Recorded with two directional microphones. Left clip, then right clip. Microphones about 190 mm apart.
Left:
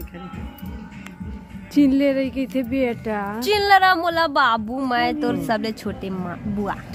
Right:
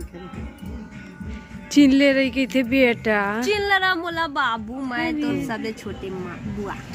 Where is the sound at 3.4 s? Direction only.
65° left (ahead or behind).